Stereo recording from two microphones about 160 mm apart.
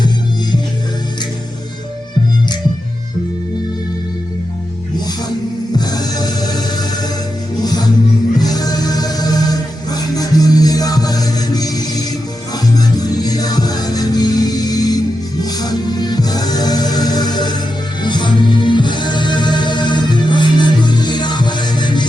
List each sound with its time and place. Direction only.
5.7 s music: 25° left (ahead or behind)